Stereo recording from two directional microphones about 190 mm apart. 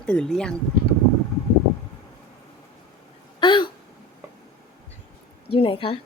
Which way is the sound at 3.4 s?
25° left (ahead or behind).